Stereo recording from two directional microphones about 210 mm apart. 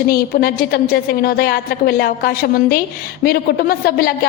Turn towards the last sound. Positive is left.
turn(degrees=45)  # may be behind; listen again after turning